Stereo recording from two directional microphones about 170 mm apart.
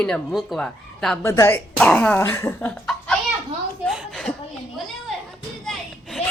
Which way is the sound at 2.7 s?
5° left (ahead or behind).